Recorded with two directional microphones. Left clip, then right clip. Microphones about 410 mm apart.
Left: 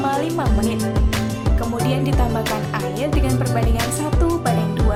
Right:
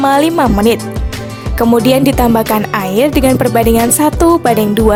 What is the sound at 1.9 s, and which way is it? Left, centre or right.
Music, right.